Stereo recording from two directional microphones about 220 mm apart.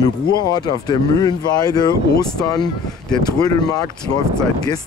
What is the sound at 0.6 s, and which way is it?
Speech, 20° left (ahead or behind).